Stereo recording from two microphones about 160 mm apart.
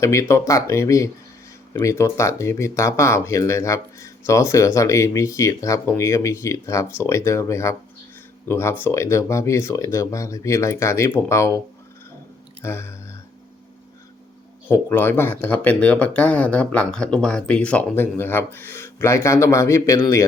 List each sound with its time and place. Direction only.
0.0 s speech: 20° left (ahead or behind)
12.6 s music: 15° left (ahead or behind)
14.7 s speech: 15° left (ahead or behind)